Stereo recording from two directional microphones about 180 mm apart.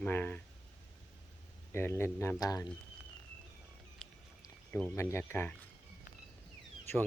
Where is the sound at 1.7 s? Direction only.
15° left (ahead or behind).